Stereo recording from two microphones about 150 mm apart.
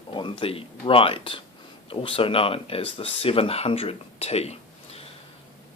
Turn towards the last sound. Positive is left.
turn(degrees=45)  # may be behind; listen again after turning